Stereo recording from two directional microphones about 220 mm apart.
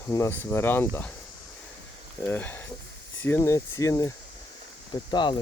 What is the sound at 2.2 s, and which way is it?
Speech, 10° left (ahead or behind).